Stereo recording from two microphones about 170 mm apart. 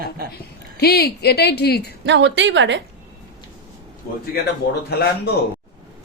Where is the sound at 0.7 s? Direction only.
70° left (ahead or behind).